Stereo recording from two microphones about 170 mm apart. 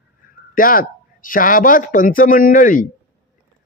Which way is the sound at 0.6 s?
55° left (ahead or behind).